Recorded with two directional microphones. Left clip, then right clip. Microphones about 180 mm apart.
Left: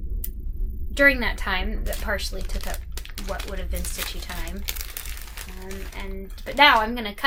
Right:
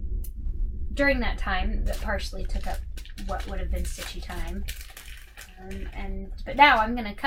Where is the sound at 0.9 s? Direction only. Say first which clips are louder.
Left 6 dB; 20° left (ahead or behind).